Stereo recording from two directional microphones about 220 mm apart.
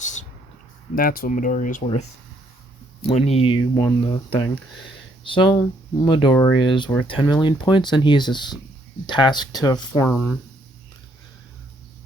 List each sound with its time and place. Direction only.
0.0 s a sound: 35° left (ahead or behind)
0.9 s speech: 40° left (ahead or behind); by 10.1 s 20° left (ahead or behind)
10.1 s speech: 5° left (ahead or behind)